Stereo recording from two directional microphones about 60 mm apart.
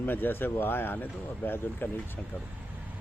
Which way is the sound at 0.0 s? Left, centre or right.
Left.